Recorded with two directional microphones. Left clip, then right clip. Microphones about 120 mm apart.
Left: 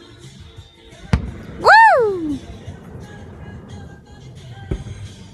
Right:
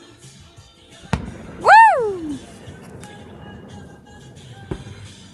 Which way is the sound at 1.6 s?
20° left (ahead or behind).